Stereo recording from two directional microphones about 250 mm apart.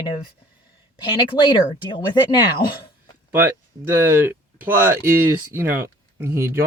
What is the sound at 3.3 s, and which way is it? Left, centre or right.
Speech, centre.